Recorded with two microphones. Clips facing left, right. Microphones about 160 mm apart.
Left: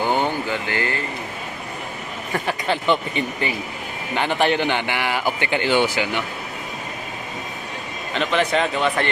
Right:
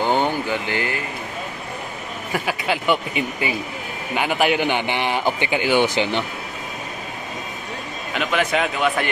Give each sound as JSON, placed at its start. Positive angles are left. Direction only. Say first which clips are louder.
{"t": 0.0, "sound": "vehicle", "louder": "right 1 dB", "side_deg": -20}
{"t": 2.3, "sound": "a man's voice", "louder": "even", "side_deg": -5}
{"t": 8.1, "sound": "a man's voice", "louder": "left 1 dB", "side_deg": -5}